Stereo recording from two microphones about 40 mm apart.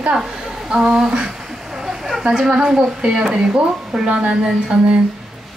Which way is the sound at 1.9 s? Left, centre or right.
Centre.